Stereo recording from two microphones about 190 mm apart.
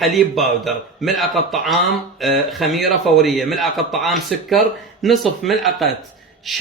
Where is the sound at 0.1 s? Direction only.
Centre (ahead or behind).